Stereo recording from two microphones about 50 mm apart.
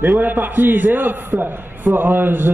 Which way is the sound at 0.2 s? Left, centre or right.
Right.